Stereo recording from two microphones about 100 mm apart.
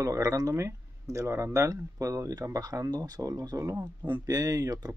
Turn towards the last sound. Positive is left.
turn(degrees=-35)  # may be behind; listen again after turning